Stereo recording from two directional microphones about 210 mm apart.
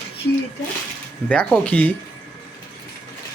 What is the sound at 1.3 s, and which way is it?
Speech, 5° left (ahead or behind).